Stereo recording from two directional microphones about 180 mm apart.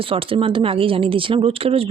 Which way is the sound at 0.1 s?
30° right (ahead or behind).